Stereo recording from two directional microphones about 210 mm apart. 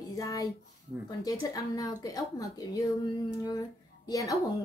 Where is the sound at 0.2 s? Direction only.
20° left (ahead or behind).